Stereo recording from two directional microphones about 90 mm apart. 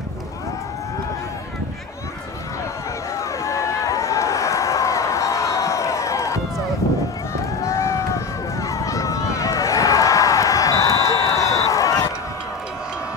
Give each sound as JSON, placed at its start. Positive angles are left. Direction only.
{"t": 3.2, "sound": "run", "side_deg": 35}
{"t": 7.6, "sound": "run", "side_deg": 35}